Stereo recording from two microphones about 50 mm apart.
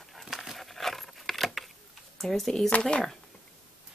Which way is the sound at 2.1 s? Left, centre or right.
Centre.